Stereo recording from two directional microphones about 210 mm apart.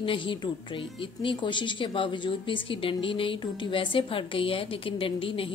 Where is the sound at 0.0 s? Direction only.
25° left (ahead or behind).